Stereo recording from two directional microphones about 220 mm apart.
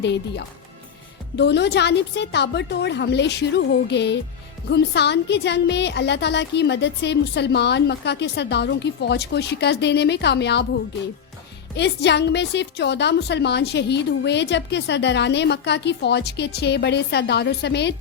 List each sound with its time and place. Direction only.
0.0 s a woman's voice: 50° left (ahead or behind)
11.8 s a woman's voice: 50° left (ahead or behind)